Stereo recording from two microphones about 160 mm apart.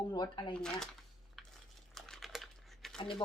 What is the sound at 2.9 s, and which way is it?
Speech, 30° left (ahead or behind).